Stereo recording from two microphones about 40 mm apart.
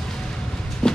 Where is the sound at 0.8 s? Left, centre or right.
Left.